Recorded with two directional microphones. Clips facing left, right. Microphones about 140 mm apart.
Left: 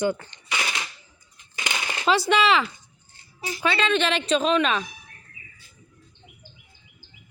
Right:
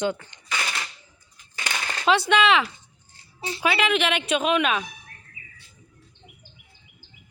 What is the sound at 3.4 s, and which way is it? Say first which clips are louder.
Speech: even; 30° right (ahead or behind).